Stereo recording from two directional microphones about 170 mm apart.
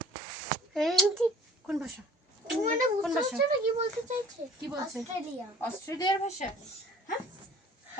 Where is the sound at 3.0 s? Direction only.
Centre (ahead or behind).